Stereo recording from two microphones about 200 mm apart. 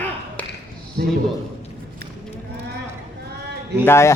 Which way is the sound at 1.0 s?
50° right (ahead or behind).